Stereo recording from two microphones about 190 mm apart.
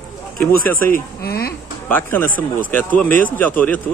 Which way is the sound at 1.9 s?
10° left (ahead or behind).